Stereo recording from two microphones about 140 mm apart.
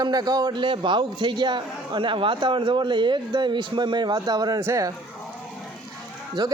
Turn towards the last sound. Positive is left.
turn(degrees=-30)  # may be behind; listen again after turning